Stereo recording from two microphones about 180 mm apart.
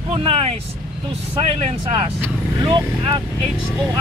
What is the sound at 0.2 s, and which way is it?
Speech, 30° right (ahead or behind).